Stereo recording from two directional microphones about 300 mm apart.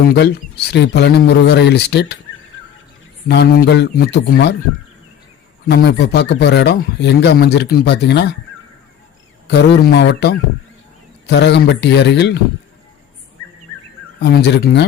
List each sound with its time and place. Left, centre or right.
0.7 s speech: left
3.2 s speech: left
5.6 s speech: left
9.5 s speech: left
14.2 s speech: left